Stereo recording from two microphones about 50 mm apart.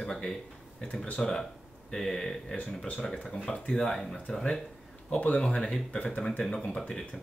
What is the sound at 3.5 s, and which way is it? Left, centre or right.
Speech, centre.